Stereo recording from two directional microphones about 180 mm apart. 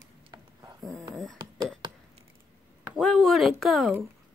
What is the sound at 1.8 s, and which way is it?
Chop, 25° right (ahead or behind).